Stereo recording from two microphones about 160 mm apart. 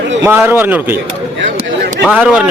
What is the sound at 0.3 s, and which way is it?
Speech, 15° right (ahead or behind).